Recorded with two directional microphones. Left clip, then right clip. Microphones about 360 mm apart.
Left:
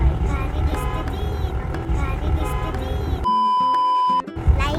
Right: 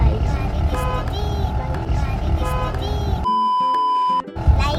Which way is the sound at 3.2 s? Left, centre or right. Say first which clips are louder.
Even; centre.